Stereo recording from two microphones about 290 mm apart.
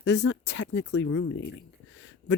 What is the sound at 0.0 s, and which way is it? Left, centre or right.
Speech, left.